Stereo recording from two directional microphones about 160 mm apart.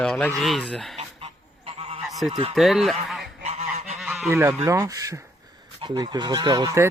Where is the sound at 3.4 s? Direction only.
45° right (ahead or behind).